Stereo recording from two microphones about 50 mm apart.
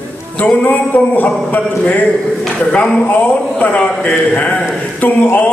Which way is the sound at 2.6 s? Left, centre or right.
Left.